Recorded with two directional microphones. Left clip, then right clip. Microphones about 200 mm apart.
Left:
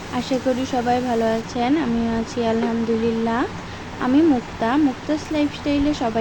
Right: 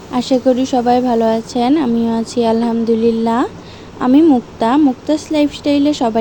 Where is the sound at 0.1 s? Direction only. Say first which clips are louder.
Right 8 dB; 40° right (ahead or behind).